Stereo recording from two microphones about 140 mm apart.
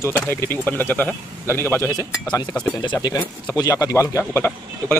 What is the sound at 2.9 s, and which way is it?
Speech, 20° left (ahead or behind).